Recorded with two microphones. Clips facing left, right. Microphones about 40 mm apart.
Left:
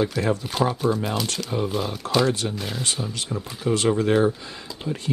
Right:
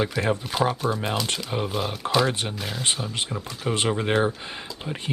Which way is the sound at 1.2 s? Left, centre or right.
Right.